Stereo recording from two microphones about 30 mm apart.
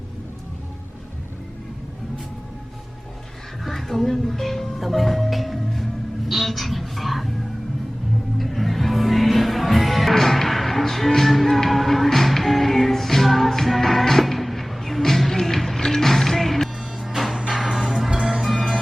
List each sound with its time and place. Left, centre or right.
3.6 s music: centre
8.4 s music: centre
18.1 s music: right
18.3 s music: centre